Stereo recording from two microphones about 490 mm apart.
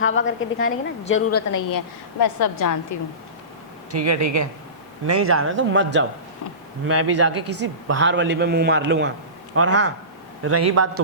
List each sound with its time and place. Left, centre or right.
0.0 s a woman's voice: left
2.2 s a woman's voice: left
3.9 s a man's voice: right